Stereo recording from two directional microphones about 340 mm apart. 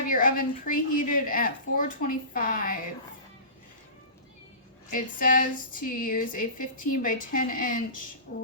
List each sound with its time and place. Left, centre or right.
0.1 s speech: left
4.9 s speech: left